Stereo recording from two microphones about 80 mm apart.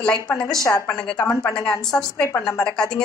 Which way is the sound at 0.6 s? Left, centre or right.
Left.